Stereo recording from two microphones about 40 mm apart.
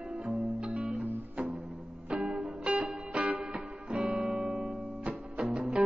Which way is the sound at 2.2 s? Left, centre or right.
Right.